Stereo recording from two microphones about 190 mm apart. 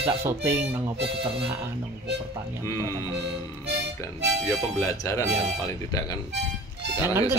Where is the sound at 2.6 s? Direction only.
15° left (ahead or behind).